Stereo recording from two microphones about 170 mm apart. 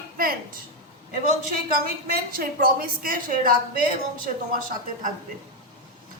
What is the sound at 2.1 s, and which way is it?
A woman's voice, 60° right (ahead or behind).